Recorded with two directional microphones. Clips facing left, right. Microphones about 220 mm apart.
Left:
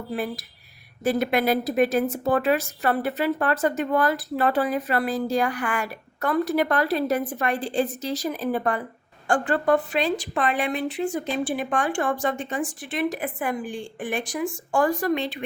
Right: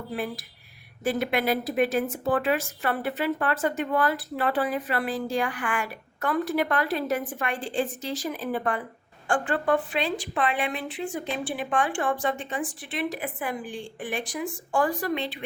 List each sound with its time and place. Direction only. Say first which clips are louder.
0.1 s speech: left 3 dB; 40° left (ahead or behind)